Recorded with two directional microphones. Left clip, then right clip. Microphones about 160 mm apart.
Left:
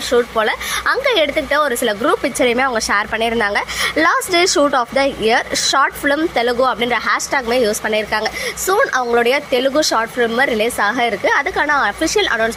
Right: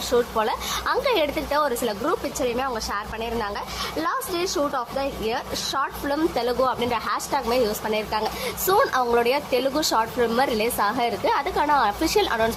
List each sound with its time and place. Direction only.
0.1 s a woman's voice: 10° left (ahead or behind)
2.2 s a woman's voice: 25° left (ahead or behind)
6.3 s a woman's voice: 15° left (ahead or behind)